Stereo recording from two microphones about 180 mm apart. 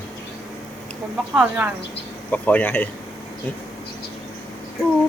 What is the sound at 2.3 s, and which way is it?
Speech, 10° left (ahead or behind).